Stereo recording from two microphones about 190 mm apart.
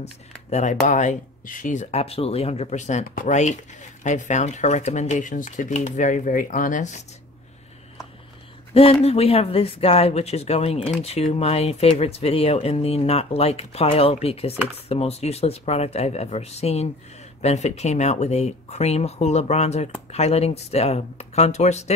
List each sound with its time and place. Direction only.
0.5 s speech: 40° left (ahead or behind)
9.0 s speech: 30° left (ahead or behind)